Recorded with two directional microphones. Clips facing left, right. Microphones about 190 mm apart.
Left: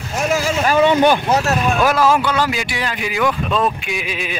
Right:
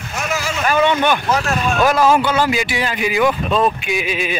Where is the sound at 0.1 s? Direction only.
30° left (ahead or behind).